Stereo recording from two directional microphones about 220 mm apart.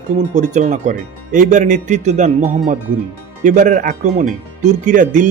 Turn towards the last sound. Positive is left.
turn(degrees=-35)  # may be behind; listen again after turning